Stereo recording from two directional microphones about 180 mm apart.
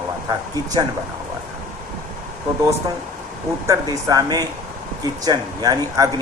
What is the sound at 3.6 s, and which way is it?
Speech, 20° right (ahead or behind).